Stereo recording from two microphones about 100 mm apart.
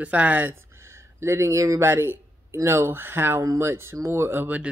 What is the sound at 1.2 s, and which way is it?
Speech, 30° right (ahead or behind).